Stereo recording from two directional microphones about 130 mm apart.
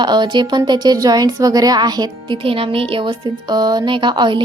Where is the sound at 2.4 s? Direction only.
45° right (ahead or behind).